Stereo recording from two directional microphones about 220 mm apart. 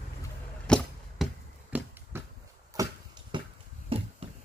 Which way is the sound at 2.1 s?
10° right (ahead or behind).